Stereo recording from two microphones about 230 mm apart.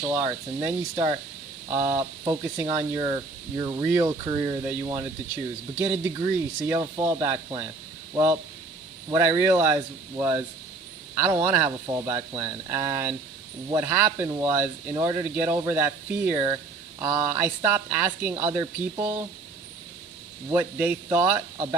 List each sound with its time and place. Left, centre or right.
0.0 s speech: centre
20.5 s speech: centre